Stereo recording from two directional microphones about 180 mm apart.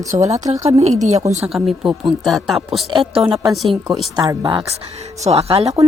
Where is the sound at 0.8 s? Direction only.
40° right (ahead or behind).